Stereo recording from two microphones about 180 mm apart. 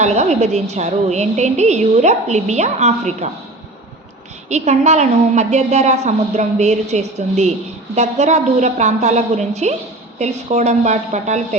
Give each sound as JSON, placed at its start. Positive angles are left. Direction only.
{"t": 0.0, "sound": "a woman's voice", "side_deg": -40}
{"t": 4.4, "sound": "a woman's voice", "side_deg": -40}